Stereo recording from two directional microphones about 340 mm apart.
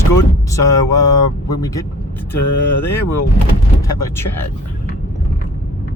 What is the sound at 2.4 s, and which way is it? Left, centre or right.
Speech, left.